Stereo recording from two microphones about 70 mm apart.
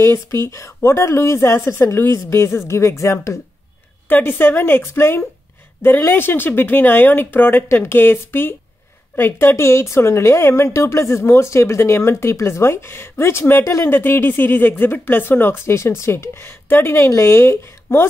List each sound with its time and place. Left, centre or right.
0.0 s a woman's voice: left
4.1 s speech: left